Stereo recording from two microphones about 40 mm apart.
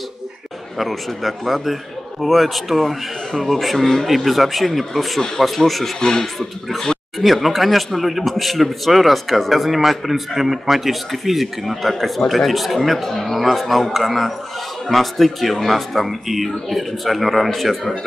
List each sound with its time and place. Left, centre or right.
0.7 s a man's voice: centre
5.9 s speech: centre
7.2 s a man's voice: centre